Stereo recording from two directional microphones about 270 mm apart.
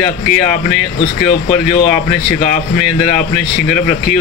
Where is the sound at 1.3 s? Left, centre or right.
Left.